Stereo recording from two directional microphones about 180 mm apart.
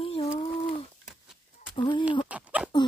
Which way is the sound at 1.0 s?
5° right (ahead or behind).